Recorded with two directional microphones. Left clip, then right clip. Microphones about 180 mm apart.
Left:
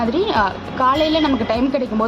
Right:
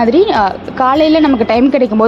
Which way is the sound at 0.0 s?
35° right (ahead or behind).